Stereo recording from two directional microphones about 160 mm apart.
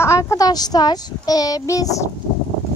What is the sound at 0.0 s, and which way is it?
A child's voice, 20° left (ahead or behind).